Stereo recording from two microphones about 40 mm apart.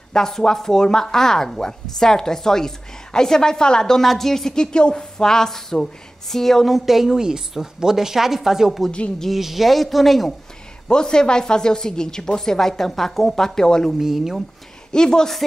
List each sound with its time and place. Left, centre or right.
0.1 s speech: centre
6.7 s a woman's voice: centre
10.9 s speech: centre
13.9 s a woman's voice: centre
14.9 s a woman's voice: centre